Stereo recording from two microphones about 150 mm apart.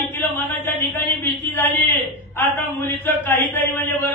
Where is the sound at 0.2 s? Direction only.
15° left (ahead or behind).